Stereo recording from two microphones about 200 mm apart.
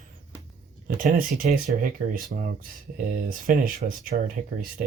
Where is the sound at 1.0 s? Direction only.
40° right (ahead or behind).